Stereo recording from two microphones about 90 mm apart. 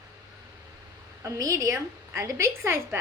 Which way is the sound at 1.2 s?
35° right (ahead or behind).